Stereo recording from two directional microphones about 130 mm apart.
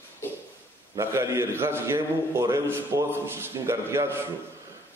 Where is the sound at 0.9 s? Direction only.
20° right (ahead or behind).